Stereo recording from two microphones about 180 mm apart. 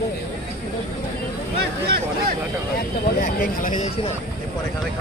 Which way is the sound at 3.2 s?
50° left (ahead or behind).